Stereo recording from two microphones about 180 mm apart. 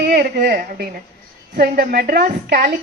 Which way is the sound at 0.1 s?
60° right (ahead or behind).